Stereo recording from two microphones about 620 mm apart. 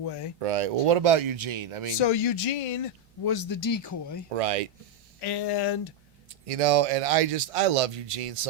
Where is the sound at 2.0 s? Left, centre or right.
Left.